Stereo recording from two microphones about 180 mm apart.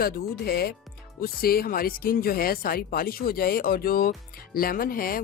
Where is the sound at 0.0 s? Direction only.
60° left (ahead or behind).